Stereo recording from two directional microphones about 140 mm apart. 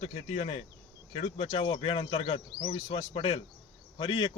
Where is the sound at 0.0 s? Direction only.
50° left (ahead or behind).